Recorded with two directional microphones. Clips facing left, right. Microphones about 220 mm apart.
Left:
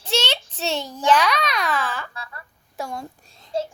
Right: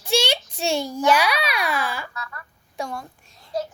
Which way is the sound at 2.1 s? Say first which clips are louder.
Right 2 dB; 30° left (ahead or behind).